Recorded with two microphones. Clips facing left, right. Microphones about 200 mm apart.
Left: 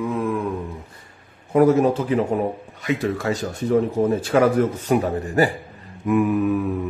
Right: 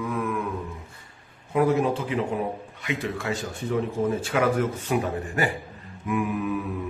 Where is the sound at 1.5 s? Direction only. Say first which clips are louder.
Left 6 dB; 45° left (ahead or behind).